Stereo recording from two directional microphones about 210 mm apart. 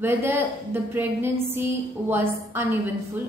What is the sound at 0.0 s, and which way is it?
A woman's voice, 10° right (ahead or behind).